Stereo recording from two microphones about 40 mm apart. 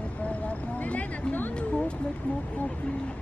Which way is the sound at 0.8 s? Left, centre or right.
Left.